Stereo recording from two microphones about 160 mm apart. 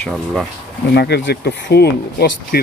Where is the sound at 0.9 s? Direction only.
90° left.